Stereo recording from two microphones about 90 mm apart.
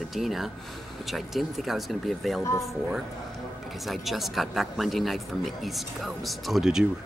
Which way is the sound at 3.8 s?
Centre (ahead or behind).